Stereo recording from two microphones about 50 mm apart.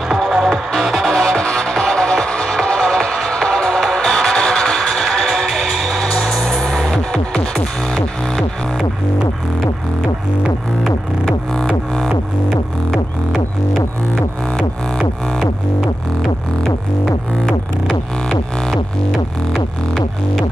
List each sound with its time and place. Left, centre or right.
0.1 s music: centre
1.2 s music: centre
11.5 s music: centre
12.9 s music: centre